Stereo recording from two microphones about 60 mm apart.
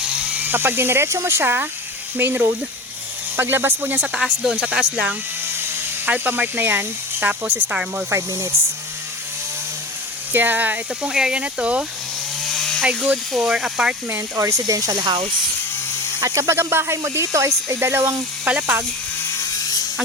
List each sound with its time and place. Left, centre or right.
0.0 s electric shaver: centre
0.4 s speech: right
4.0 s speech: centre
6.1 s speech: right
8.1 s speech: right
10.3 s speech: right
11.0 s speech: centre
12.5 s chainsaw: centre
13.3 s speech: centre
14.1 s speech: right
16.2 s speech: right
17.7 s speech: right
19.3 s electric toothbrush: left